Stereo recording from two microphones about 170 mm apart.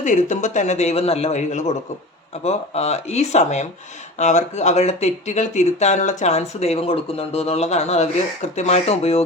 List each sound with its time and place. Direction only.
0.0 s a man's voice: 45° left (ahead or behind)